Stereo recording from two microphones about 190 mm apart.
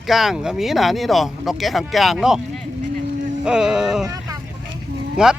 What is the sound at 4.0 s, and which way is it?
Vehicle, 20° right (ahead or behind).